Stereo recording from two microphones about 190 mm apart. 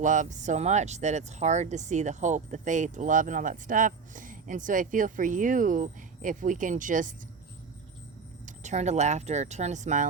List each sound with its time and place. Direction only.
0.0 s speech: 40° right (ahead or behind)
8.4 s speech: 40° right (ahead or behind)